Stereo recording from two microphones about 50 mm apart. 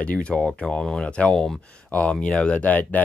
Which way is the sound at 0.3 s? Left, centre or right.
Centre.